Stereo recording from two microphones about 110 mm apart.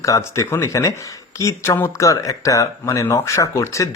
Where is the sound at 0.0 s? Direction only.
30° left (ahead or behind).